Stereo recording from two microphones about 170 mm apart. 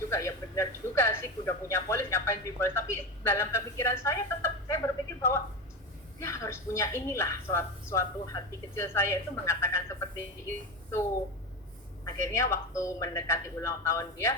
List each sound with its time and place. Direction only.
0.1 s speech: 15° left (ahead or behind)
12.0 s speech: 15° left (ahead or behind)